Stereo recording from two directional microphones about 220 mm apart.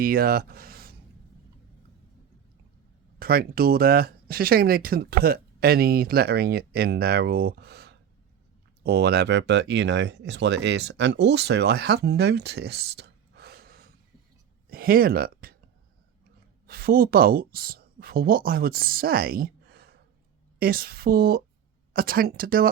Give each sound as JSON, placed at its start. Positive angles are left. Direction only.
{"t": 0.0, "sound": "speech", "side_deg": -40}
{"t": 3.2, "sound": "speech", "side_deg": -40}
{"t": 16.6, "sound": "speech", "side_deg": -45}